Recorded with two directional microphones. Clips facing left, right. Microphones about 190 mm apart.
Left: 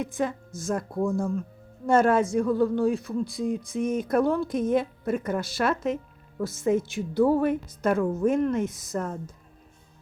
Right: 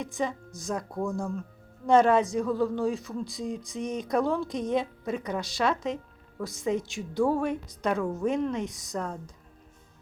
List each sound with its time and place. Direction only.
0.0 s a man's voice: 5° left (ahead or behind)